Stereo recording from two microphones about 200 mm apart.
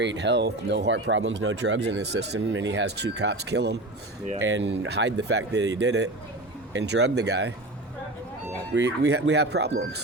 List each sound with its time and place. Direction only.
0.0 s speech: 60° right (ahead or behind)
8.7 s speech: 55° right (ahead or behind)